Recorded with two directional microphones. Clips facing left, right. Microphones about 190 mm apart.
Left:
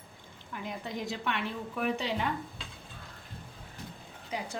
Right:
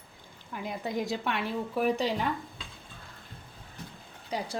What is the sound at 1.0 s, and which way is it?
A woman's voice, 40° right (ahead or behind).